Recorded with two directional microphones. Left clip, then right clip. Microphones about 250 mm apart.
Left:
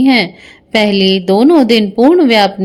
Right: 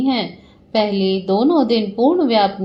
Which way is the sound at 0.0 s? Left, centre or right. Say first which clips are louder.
Left 9 dB; left.